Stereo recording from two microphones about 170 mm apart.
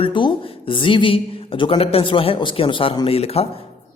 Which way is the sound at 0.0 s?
30° left (ahead or behind).